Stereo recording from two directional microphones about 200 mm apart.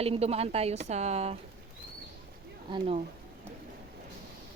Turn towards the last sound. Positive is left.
turn(degrees=-25)  # may be behind; listen again after turning